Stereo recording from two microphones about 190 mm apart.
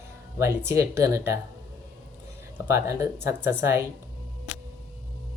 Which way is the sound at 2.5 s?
15° right (ahead or behind).